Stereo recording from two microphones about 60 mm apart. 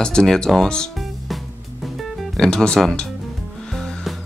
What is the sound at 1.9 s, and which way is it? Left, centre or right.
Music, centre.